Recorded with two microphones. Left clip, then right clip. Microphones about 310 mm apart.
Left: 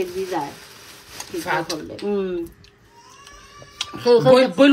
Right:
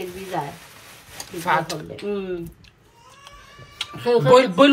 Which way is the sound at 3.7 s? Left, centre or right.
Left.